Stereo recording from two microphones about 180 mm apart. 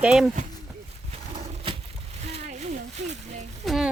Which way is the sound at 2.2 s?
35° right (ahead or behind).